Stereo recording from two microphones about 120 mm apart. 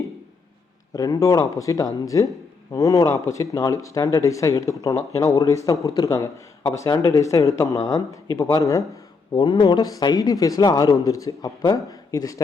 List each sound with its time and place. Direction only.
0.9 s speech: 30° left (ahead or behind)
9.3 s a man's voice: 40° left (ahead or behind)